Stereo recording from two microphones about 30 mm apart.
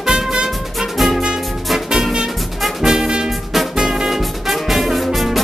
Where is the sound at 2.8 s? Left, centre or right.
Centre.